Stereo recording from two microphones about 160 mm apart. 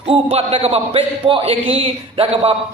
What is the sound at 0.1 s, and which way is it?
A man's voice, 35° right (ahead or behind).